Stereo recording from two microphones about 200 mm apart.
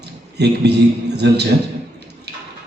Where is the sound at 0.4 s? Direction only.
55° right (ahead or behind).